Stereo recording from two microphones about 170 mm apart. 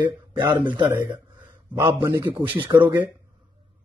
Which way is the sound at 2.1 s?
15° right (ahead or behind).